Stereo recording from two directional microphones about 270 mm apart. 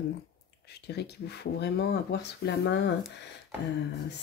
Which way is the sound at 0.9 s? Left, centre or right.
Left.